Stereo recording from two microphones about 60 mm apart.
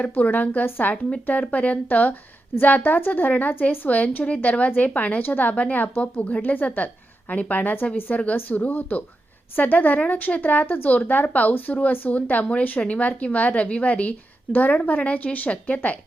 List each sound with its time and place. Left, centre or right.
0.2 s a woman's voice: left